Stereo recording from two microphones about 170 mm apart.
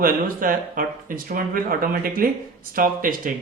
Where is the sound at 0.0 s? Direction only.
55° right (ahead or behind).